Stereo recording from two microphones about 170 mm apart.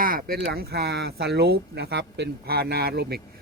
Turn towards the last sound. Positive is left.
turn(degrees=-70)  # may be behind; listen again after turning